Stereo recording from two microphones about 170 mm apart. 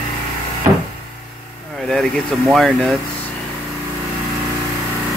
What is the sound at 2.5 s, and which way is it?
Speech, centre (ahead or behind).